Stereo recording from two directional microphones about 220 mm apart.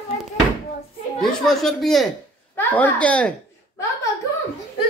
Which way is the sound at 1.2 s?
Centre (ahead or behind).